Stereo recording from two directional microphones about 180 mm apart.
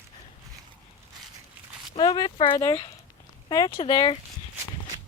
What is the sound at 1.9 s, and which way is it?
Speech, 20° left (ahead or behind).